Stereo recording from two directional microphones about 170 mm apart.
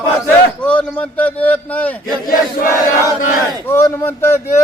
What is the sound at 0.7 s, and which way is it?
A man's voice, 5° left (ahead or behind).